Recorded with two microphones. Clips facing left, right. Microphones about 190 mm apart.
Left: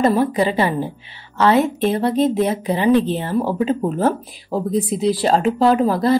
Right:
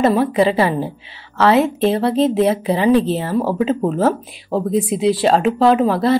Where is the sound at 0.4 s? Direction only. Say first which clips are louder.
Right 3 dB; 30° right (ahead or behind).